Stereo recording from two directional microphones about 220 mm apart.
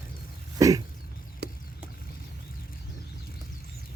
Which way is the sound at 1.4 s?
45° right (ahead or behind).